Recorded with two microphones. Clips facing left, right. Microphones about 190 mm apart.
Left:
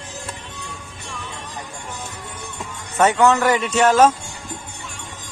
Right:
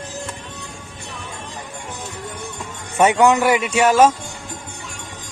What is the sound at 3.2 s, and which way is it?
Speech, 15° right (ahead or behind).